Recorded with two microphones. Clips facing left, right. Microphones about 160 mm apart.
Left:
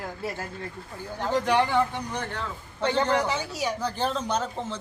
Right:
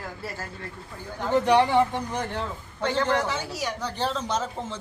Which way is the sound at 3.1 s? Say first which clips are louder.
Left 1 dB; 10° left (ahead or behind).